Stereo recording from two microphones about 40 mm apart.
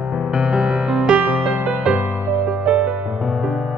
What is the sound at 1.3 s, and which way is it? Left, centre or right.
Music, right.